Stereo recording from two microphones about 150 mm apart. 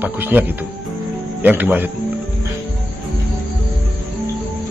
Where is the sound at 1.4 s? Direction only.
10° right (ahead or behind).